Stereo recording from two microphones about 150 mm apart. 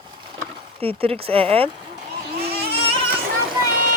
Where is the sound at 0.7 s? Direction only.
40° right (ahead or behind).